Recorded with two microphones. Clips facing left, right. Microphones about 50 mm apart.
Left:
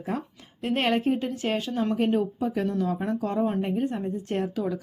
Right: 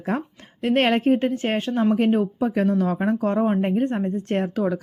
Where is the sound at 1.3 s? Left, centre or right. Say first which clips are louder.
Right 4 dB; right.